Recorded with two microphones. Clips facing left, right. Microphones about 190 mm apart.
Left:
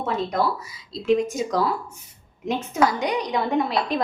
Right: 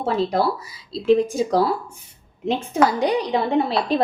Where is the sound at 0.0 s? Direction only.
30° right (ahead or behind).